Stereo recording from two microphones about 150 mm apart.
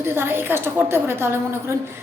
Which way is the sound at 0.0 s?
15° right (ahead or behind).